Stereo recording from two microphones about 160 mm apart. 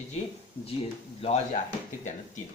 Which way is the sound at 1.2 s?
40° left (ahead or behind).